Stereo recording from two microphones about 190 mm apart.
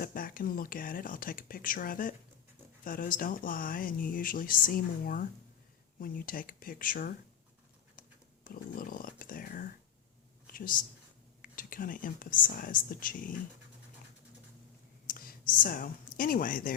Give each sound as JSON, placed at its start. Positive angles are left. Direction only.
{"t": 0.0, "sound": "speech", "side_deg": 50}
{"t": 8.4, "sound": "speech", "side_deg": 45}
{"t": 10.4, "sound": "a sound", "side_deg": 50}
{"t": 11.4, "sound": "speech", "side_deg": 50}
{"t": 15.0, "sound": "whispering", "side_deg": 50}
{"t": 16.1, "sound": "speech", "side_deg": 45}